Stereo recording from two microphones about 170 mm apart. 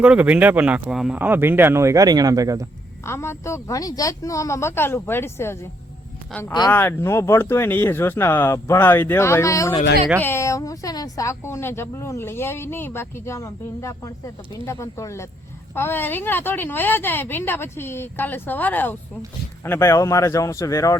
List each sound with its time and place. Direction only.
0.0 s speech: 5° right (ahead or behind)
3.0 s speech: 15° left (ahead or behind)
6.7 s speech: 10° left (ahead or behind)